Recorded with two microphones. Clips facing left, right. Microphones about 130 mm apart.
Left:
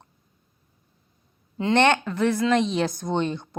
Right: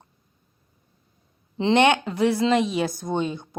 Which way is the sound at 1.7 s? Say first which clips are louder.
Right 1 dB; 15° right (ahead or behind).